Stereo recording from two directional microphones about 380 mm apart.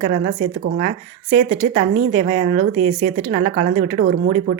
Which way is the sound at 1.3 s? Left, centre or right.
Centre.